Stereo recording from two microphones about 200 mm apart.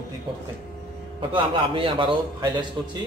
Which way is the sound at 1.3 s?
25° right (ahead or behind).